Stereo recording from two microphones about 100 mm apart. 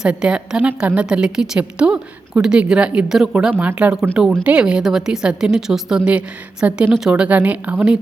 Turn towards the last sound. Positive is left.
turn(degrees=-10)  # may be behind; listen again after turning